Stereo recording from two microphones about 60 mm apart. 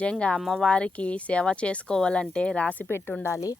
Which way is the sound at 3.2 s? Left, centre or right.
Left.